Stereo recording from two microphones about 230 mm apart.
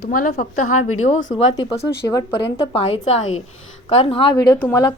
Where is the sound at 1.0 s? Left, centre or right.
Left.